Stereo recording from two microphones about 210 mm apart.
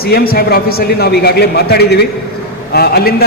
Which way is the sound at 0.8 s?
50° left (ahead or behind).